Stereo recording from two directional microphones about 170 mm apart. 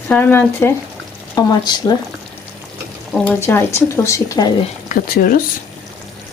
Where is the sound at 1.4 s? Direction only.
25° left (ahead or behind).